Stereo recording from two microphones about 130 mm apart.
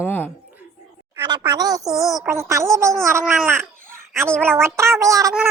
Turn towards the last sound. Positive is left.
turn(degrees=-25)  # may be behind; listen again after turning